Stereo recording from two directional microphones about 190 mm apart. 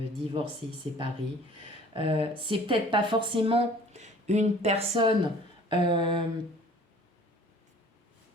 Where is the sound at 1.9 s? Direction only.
30° right (ahead or behind).